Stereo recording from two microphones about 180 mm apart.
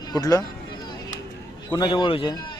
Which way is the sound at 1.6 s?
25° left (ahead or behind).